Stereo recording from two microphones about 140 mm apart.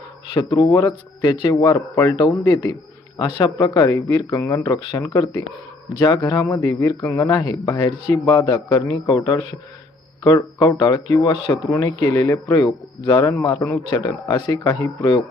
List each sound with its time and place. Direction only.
0.3 s speech: 30° left (ahead or behind)